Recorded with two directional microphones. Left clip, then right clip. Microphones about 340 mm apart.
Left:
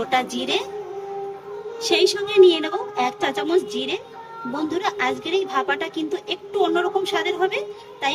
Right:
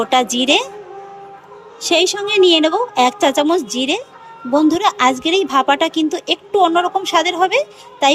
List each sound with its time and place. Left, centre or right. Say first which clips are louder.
0.1 s a woman's voice: right 8 dB; centre
1.8 s a woman's voice: right 4 dB; centre